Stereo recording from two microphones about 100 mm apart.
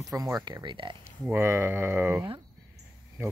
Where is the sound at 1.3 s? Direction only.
25° right (ahead or behind).